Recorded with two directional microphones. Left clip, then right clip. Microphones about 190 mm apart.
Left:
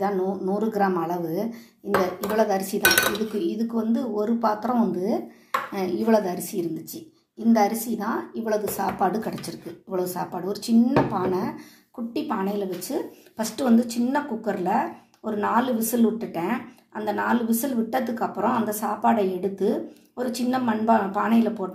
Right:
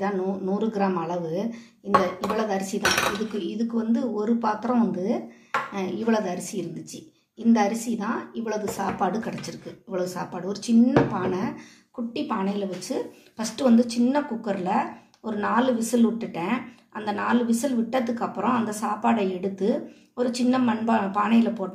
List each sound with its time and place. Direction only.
0.0 s speech: 20° left (ahead or behind)
7.5 s a woman's voice: centre (ahead or behind)
8.0 s a woman's voice: 20° left (ahead or behind)